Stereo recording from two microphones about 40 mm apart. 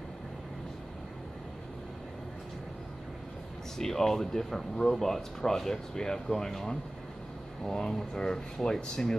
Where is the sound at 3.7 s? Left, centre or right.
Centre.